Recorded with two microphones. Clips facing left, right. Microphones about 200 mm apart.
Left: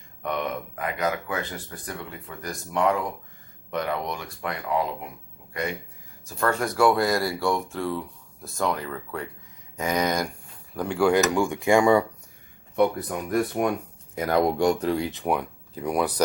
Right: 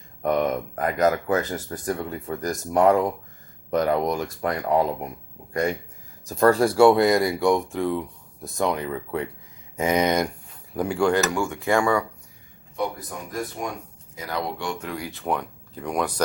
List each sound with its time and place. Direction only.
0.2 s speech: 45° right (ahead or behind)
6.2 s speech: 35° right (ahead or behind)
10.8 s speech: centre (ahead or behind)
11.1 s speech: 15° left (ahead or behind)
12.7 s speech: 60° left (ahead or behind); by 16.2 s 10° left (ahead or behind)